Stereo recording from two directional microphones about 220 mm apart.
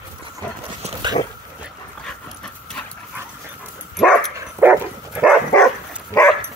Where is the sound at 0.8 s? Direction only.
30° right (ahead or behind).